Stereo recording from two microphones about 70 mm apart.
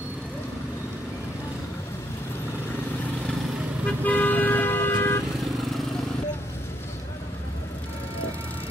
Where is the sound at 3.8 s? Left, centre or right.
Left.